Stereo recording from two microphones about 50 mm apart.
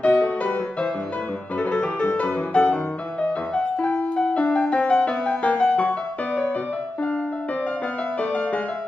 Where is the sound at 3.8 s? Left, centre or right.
Left.